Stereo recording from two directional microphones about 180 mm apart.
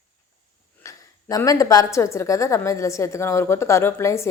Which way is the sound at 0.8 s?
20° left (ahead or behind).